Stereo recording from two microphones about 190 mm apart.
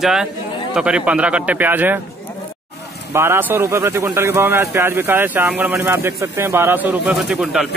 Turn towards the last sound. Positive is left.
turn(degrees=0)  # may be behind; listen again after turning